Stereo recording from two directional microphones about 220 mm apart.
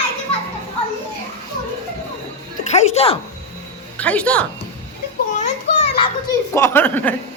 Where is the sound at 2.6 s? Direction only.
30° left (ahead or behind).